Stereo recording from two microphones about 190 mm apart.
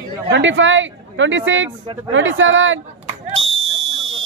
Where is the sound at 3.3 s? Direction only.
90° right.